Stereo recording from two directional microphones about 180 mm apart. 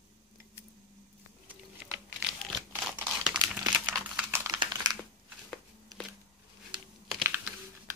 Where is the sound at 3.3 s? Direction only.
20° right (ahead or behind).